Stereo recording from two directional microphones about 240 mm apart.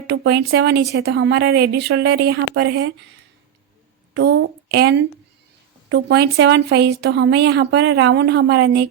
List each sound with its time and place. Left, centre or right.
0.1 s a woman's voice: right
4.1 s a woman's voice: right